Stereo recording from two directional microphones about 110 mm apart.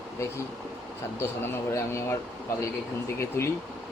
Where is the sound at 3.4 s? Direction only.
20° left (ahead or behind).